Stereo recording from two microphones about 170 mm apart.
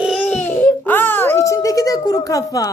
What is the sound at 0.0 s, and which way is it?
Baby cry, 5° left (ahead or behind).